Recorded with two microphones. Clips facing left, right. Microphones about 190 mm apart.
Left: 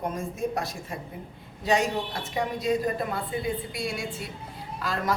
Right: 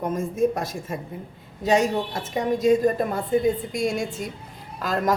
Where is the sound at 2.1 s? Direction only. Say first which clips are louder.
Right 5 dB; 45° right (ahead or behind).